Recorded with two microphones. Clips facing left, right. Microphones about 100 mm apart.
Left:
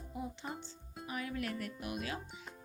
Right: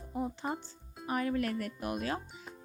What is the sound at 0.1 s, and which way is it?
Music, 45° right (ahead or behind).